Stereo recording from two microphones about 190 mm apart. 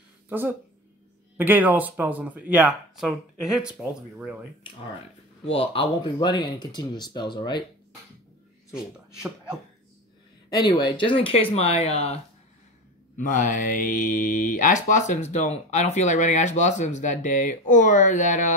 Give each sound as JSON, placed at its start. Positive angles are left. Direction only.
{"t": 1.4, "sound": "speech", "side_deg": -10}
{"t": 5.7, "sound": "speech", "side_deg": 25}
{"t": 8.7, "sound": "speech", "side_deg": -5}
{"t": 10.5, "sound": "speech", "side_deg": 25}
{"t": 13.2, "sound": "speech", "side_deg": 40}